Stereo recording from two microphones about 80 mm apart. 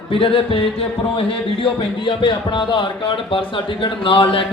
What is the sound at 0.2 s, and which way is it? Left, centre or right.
Speech, left.